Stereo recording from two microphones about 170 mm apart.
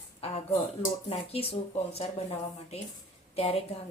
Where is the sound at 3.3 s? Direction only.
35° left (ahead or behind).